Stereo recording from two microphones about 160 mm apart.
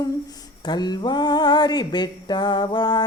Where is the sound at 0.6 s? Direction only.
25° left (ahead or behind).